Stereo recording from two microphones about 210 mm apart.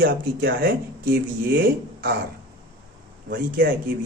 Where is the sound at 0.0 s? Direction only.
45° right (ahead or behind).